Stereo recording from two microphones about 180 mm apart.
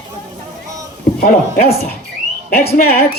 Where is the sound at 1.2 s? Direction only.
50° left (ahead or behind).